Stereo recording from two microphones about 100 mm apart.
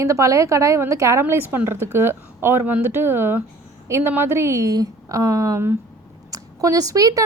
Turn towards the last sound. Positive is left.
turn(degrees=-35)  # may be behind; listen again after turning